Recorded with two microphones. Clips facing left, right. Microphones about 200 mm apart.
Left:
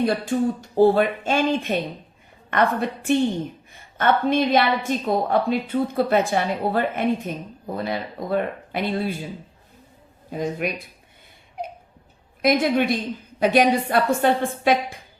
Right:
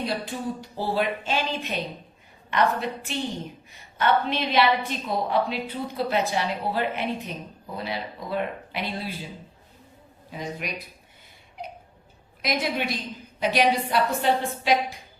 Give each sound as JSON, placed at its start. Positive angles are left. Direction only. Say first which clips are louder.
{"t": 0.0, "sound": "a woman's voice", "louder": "left 8 dB", "side_deg": 50}
{"t": 10.3, "sound": "a woman's voice", "louder": "left 8 dB", "side_deg": 50}
{"t": 12.4, "sound": "a woman's voice", "louder": "left 8 dB", "side_deg": 50}